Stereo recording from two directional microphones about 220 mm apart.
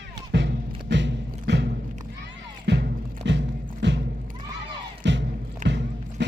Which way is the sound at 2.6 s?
50° right (ahead or behind).